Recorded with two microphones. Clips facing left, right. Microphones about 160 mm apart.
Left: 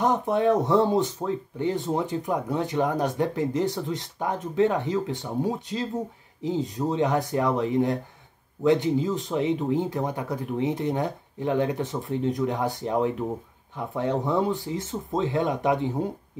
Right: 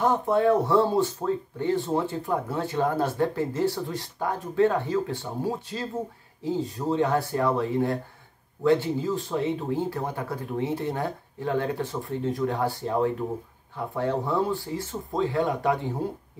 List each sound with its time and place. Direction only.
0.0 s speech: 20° left (ahead or behind)